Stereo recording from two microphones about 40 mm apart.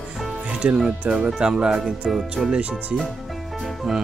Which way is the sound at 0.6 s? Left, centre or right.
Right.